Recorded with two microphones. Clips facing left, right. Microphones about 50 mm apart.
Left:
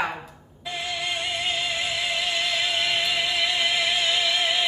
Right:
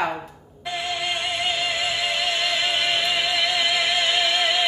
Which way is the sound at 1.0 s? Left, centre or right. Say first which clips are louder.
Right 1 dB; right.